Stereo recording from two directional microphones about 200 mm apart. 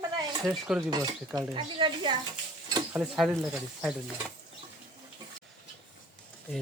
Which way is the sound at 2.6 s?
20° right (ahead or behind).